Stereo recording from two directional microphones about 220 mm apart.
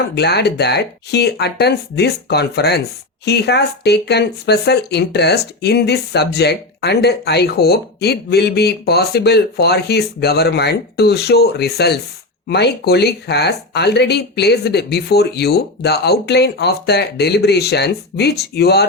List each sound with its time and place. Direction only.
0.2 s speech: 50° left (ahead or behind)